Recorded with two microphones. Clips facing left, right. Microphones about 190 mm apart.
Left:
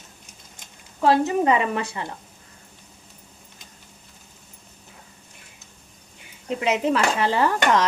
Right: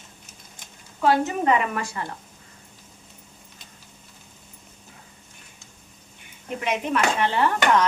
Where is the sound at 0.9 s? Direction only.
30° left (ahead or behind).